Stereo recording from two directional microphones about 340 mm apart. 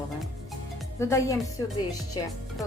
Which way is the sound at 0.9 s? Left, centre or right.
Centre.